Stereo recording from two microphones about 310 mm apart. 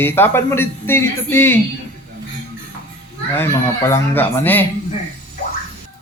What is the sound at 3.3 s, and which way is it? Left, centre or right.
A man's voice, centre.